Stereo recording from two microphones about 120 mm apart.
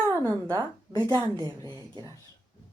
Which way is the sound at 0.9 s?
35° right (ahead or behind).